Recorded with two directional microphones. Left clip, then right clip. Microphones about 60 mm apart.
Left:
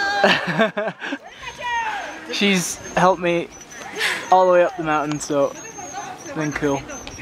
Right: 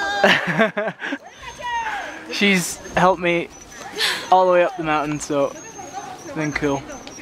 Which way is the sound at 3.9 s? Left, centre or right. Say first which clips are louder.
Right 1 dB; right.